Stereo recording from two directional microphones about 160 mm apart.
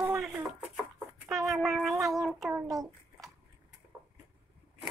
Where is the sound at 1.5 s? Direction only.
Centre (ahead or behind).